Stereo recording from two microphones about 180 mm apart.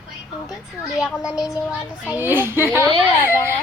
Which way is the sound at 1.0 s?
5° right (ahead or behind).